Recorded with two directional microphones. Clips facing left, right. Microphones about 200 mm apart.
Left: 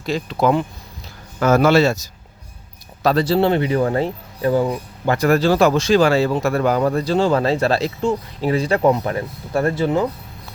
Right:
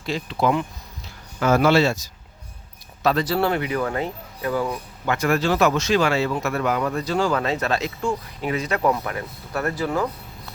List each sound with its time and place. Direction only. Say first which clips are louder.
0.0 s speech: left 4 dB; 40° left (ahead or behind); by 4.8 s 25° left (ahead or behind)
5.0 s speech: left 5 dB; 35° left (ahead or behind)